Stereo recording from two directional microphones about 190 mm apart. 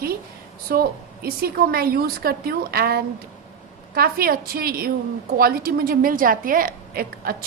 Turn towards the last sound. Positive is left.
turn(degrees=-50)  # may be behind; listen again after turning